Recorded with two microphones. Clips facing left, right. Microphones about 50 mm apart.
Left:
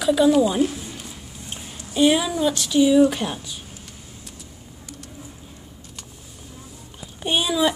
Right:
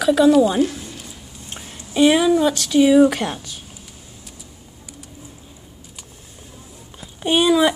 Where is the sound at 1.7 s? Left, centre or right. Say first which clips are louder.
Right 3 dB; right.